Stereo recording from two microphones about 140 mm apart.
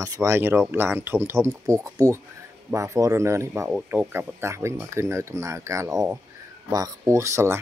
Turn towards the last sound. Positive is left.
turn(degrees=-20)  # may be behind; listen again after turning